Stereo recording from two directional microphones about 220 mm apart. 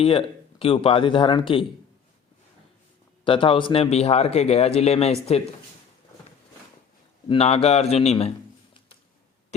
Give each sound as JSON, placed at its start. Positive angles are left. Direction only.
{"t": 0.0, "sound": "speech", "side_deg": 25}
{"t": 3.2, "sound": "speech", "side_deg": 25}
{"t": 7.3, "sound": "speech", "side_deg": 25}